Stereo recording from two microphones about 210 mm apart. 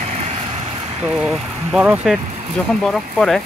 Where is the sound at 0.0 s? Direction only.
30° right (ahead or behind).